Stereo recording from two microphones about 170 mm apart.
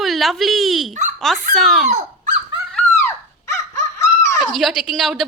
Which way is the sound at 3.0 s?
15° left (ahead or behind).